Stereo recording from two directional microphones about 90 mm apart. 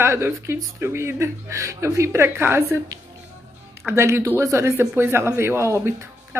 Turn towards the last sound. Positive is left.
turn(degrees=-30)  # may be behind; listen again after turning